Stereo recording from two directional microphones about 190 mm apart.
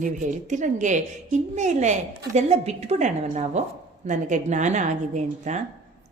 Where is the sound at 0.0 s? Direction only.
40° right (ahead or behind).